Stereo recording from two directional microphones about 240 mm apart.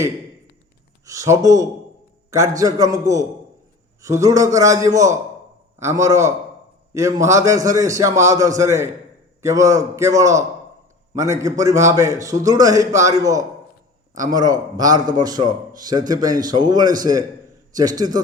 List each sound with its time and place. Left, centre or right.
1.0 s a man's voice: centre